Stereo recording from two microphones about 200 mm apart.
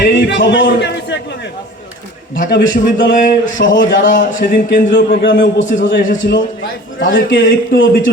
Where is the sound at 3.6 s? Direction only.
65° left (ahead or behind).